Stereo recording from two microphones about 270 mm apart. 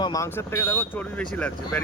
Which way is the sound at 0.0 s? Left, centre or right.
Centre.